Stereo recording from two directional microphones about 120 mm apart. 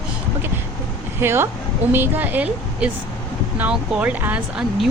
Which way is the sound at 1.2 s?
20° right (ahead or behind).